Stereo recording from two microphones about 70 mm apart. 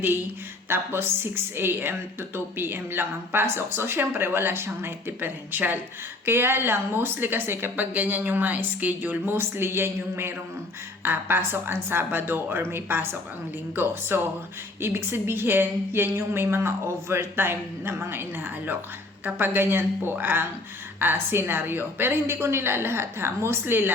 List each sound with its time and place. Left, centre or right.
0.7 s a woman's voice: right